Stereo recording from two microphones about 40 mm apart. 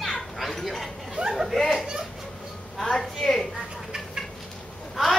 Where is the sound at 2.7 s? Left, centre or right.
Centre.